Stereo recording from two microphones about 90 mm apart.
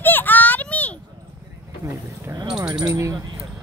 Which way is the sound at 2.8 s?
35° right (ahead or behind).